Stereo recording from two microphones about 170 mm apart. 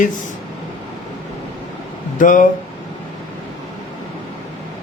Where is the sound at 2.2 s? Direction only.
50° left (ahead or behind).